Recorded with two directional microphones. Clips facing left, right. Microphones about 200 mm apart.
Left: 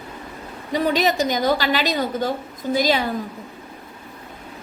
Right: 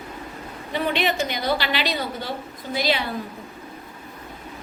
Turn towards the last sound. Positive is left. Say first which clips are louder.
# left 5 dB
turn(degrees=45)  # may be behind; listen again after turning